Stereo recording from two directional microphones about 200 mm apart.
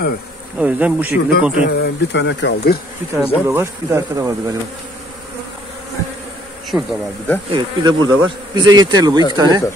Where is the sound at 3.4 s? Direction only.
15° right (ahead or behind).